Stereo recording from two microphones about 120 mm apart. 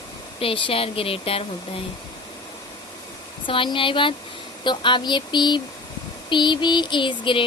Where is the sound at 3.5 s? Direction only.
45° left (ahead or behind).